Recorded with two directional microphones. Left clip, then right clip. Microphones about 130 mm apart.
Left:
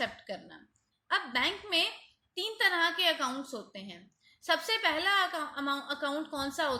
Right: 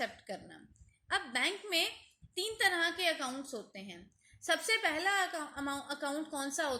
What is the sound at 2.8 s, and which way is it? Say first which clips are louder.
Speech: left 4 dB; 90° left.